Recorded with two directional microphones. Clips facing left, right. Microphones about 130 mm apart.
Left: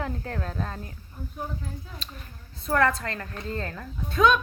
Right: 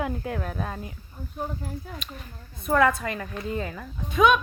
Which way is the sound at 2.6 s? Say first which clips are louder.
Right 2 dB; 15° right (ahead or behind).